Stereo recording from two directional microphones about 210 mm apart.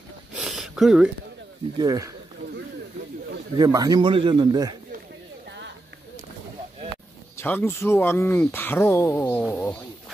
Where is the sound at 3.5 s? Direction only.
20° right (ahead or behind).